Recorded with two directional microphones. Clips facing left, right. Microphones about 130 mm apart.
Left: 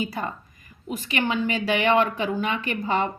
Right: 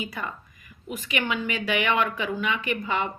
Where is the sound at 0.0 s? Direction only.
35° left (ahead or behind).